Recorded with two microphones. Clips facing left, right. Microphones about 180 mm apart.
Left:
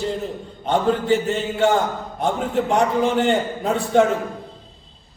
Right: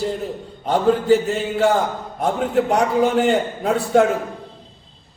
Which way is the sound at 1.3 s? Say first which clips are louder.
Right 1 dB; 5° right (ahead or behind).